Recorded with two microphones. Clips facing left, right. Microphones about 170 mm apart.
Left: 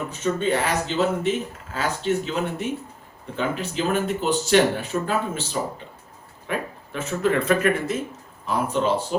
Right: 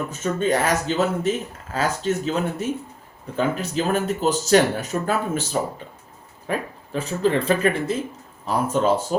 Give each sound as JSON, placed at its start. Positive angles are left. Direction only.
{"t": 0.1, "sound": "speech", "side_deg": -45}
{"t": 6.5, "sound": "speech", "side_deg": -35}
{"t": 8.7, "sound": "speech", "side_deg": -45}